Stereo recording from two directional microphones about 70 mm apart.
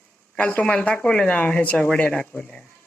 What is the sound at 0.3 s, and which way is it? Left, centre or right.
Speech, centre.